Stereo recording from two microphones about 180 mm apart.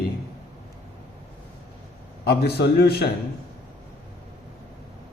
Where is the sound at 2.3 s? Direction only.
65° left (ahead or behind).